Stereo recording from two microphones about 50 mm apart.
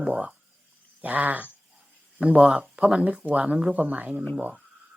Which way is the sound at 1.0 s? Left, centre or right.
Right.